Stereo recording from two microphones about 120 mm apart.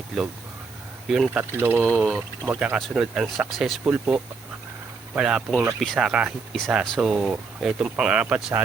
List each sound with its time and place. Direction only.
0.1 s speech: centre (ahead or behind)
1.3 s speech: 20° right (ahead or behind)
1.8 s speech: 10° left (ahead or behind)
2.4 s speech: 15° right (ahead or behind)
3.8 s speech: 10° right (ahead or behind)
5.8 s speech: 5° left (ahead or behind)
6.1 s speech: 5° right (ahead or behind)